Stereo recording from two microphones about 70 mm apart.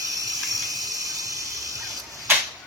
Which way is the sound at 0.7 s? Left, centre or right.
Right.